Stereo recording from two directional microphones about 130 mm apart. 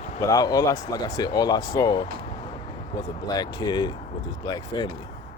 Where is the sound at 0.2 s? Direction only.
25° left (ahead or behind).